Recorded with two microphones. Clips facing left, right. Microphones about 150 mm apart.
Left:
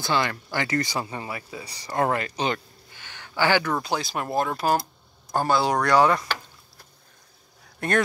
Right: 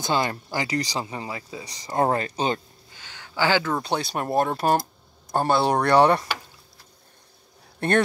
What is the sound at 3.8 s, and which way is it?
Speech, 30° right (ahead or behind).